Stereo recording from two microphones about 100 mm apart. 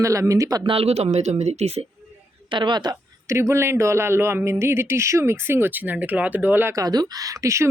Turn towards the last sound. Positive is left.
turn(degrees=-30)  # may be behind; listen again after turning